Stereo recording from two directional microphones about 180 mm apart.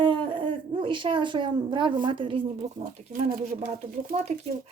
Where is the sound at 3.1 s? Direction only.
50° right (ahead or behind).